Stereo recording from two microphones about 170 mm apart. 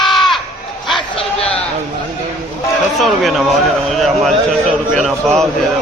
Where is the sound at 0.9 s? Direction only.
35° left (ahead or behind).